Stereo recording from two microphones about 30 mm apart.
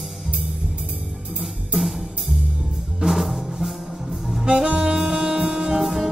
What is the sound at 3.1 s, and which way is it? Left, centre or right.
Music, centre.